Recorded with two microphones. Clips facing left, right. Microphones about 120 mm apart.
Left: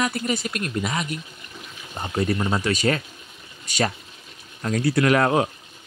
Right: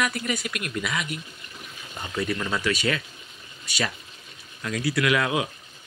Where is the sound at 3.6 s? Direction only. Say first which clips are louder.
Left 5 dB; 40° left (ahead or behind).